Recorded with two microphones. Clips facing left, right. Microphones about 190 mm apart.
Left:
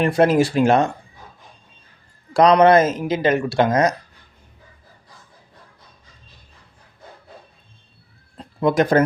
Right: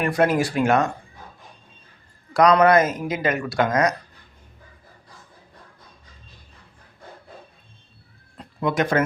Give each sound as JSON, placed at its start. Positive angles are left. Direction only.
{"t": 0.0, "sound": "speech", "side_deg": 30}
{"t": 2.3, "sound": "speech", "side_deg": 25}
{"t": 8.4, "sound": "speech", "side_deg": 35}